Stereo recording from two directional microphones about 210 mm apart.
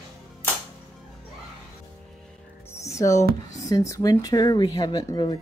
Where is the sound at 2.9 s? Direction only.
15° left (ahead or behind).